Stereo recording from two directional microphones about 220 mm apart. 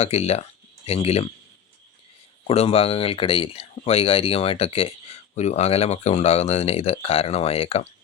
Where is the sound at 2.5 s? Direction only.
25° left (ahead or behind).